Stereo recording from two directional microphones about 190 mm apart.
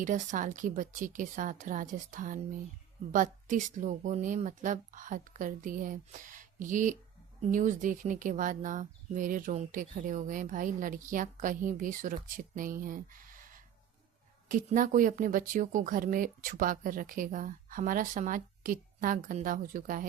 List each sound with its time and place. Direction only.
0.0 s speech: 40° right (ahead or behind)